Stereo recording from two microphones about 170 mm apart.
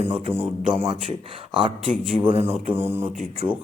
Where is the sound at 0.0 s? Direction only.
35° right (ahead or behind).